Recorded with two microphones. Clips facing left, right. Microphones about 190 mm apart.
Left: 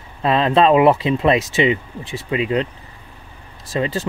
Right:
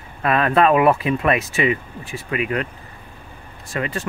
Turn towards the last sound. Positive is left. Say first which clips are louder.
# left 4 dB
turn(degrees=25)  # may be behind; listen again after turning